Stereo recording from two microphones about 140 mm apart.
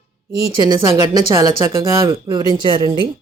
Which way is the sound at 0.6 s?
30° right (ahead or behind).